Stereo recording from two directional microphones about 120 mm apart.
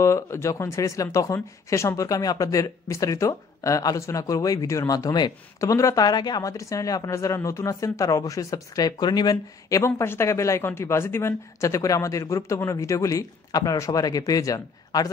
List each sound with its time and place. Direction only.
0.0 s speech: 25° left (ahead or behind)